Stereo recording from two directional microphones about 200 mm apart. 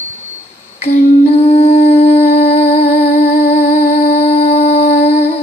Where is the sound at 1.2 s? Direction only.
30° left (ahead or behind).